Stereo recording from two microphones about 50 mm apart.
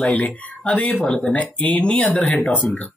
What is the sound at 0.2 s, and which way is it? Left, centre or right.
Speech, left.